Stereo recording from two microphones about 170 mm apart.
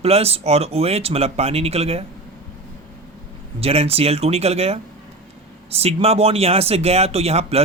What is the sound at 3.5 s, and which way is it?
Speech, 35° right (ahead or behind).